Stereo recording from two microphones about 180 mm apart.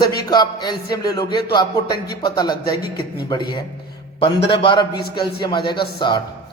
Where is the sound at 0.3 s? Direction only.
25° left (ahead or behind).